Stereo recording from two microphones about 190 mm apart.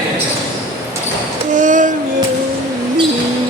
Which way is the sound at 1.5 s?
40° right (ahead or behind).